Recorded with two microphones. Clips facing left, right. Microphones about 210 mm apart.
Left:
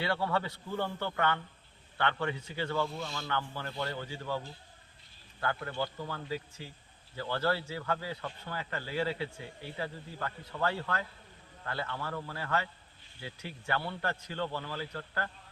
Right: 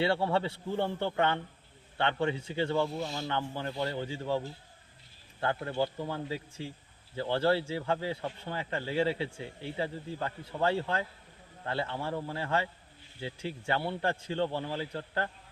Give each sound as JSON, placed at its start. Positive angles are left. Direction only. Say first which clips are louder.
{"t": 0.0, "sound": "a man's voice", "louder": "right 4 dB", "side_deg": -25}